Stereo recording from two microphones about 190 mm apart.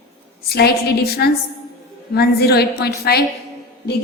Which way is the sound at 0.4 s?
55° left (ahead or behind).